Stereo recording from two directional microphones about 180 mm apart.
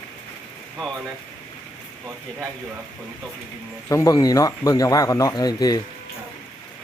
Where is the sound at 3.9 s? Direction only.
20° left (ahead or behind).